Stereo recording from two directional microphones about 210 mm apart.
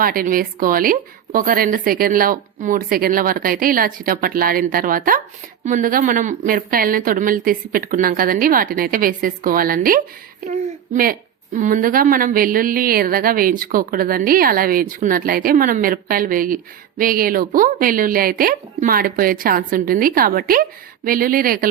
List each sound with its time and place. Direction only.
0.0 s a woman's voice: 45° right (ahead or behind)